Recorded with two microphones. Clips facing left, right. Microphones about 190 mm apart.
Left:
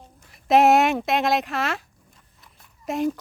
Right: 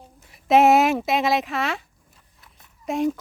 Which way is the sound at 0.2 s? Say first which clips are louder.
Right 1 dB; centre (ahead or behind).